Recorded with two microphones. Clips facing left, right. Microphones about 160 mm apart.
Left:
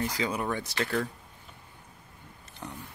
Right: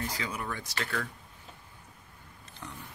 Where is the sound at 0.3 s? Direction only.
25° left (ahead or behind).